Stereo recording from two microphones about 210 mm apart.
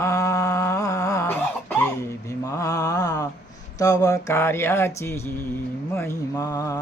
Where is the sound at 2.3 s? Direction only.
15° left (ahead or behind).